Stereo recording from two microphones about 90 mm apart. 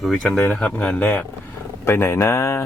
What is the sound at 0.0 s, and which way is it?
Speech, 5° left (ahead or behind).